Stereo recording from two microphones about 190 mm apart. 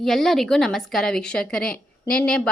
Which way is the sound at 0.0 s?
Centre (ahead or behind).